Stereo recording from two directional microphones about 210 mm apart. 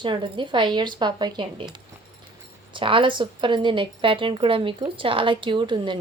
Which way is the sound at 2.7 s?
25° right (ahead or behind).